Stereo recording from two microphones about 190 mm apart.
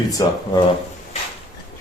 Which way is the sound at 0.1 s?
20° left (ahead or behind).